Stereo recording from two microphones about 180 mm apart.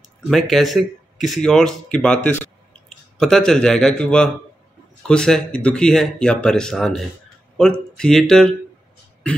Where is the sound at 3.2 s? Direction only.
Centre (ahead or behind).